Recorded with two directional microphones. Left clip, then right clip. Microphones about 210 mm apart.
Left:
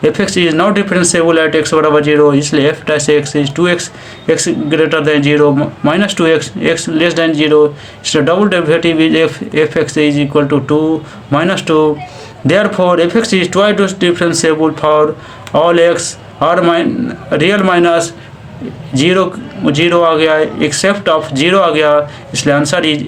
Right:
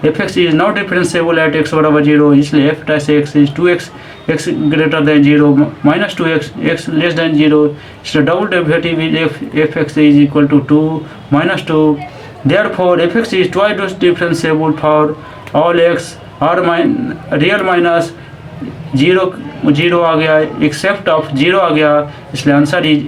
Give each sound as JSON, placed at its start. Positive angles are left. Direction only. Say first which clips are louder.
{"t": 0.0, "sound": "speech", "louder": "left 1 dB", "side_deg": 45}